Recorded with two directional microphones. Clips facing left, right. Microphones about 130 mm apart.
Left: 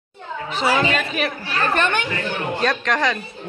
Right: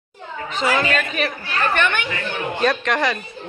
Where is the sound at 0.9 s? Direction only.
Centre (ahead or behind).